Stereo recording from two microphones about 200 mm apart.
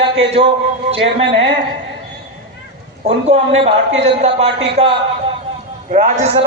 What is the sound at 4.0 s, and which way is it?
A man's voice, 30° right (ahead or behind).